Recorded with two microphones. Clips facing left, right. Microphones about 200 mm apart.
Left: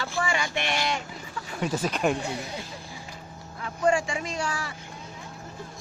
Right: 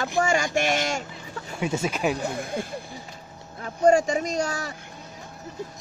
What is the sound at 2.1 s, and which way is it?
Speech, 50° right (ahead or behind).